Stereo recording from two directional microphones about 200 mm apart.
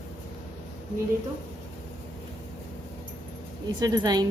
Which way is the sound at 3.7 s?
20° right (ahead or behind).